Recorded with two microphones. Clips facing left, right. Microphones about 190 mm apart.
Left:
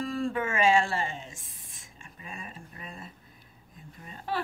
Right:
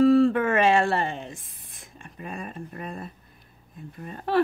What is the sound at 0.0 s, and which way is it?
Music, 65° right (ahead or behind).